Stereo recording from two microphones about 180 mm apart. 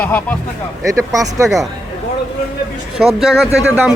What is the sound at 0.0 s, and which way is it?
Speech, 10° left (ahead or behind).